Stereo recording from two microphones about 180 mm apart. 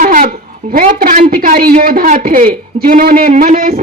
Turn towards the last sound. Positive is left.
turn(degrees=-50)  # may be behind; listen again after turning